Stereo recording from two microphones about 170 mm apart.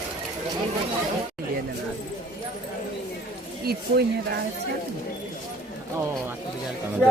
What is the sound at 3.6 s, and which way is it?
Speech, 70° right (ahead or behind).